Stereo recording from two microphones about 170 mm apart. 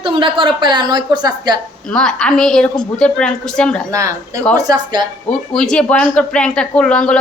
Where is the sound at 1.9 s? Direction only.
5° left (ahead or behind).